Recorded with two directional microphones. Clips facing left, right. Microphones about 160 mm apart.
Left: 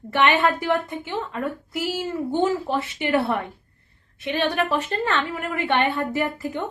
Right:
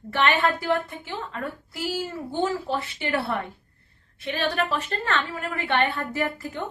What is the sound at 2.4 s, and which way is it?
Speech, 15° left (ahead or behind).